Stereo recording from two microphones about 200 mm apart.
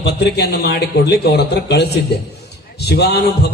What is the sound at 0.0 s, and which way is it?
Speech, 55° left (ahead or behind).